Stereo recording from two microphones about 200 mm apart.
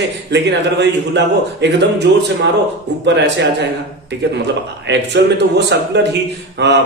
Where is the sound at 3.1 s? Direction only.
60° right (ahead or behind).